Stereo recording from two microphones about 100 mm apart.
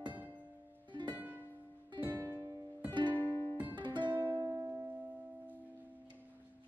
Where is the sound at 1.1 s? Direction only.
15° right (ahead or behind).